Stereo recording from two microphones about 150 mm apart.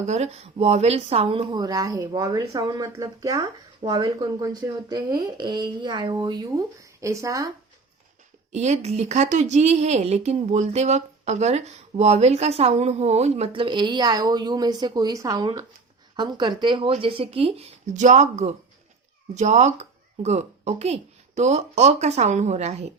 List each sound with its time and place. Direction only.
0.1 s speech: 45° right (ahead or behind); by 7.5 s 20° right (ahead or behind)
8.5 s speech: 50° right (ahead or behind)